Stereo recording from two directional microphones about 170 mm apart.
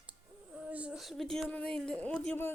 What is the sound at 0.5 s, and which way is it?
Speech, 10° right (ahead or behind).